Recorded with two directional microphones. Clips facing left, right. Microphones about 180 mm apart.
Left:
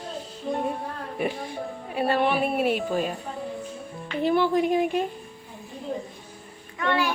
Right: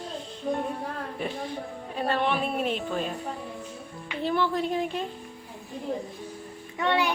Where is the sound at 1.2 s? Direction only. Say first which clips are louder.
Left 6 dB; 10° left (ahead or behind).